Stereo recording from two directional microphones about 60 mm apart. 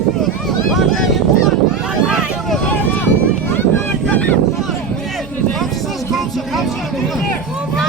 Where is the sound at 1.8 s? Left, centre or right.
Centre.